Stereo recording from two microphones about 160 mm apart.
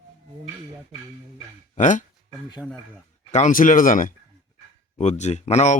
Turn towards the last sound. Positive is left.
turn(degrees=45)  # may be behind; listen again after turning